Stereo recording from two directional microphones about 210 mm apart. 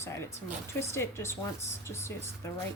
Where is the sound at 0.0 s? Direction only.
15° left (ahead or behind).